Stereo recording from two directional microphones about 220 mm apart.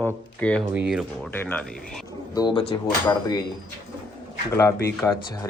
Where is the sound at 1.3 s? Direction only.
10° left (ahead or behind).